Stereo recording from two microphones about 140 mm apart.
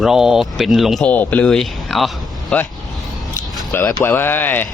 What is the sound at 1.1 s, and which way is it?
Speech, 10° left (ahead or behind).